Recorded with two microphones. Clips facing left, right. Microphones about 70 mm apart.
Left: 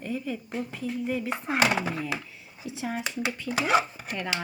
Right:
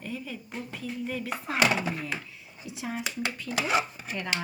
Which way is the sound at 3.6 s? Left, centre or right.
Left.